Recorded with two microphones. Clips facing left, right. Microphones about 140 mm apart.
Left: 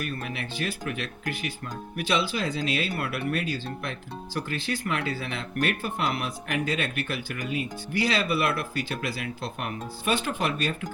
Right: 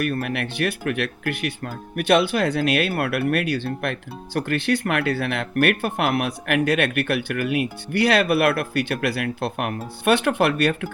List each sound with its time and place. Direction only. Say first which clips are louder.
0.0 s speech: right 9 dB; 65° right (ahead or behind)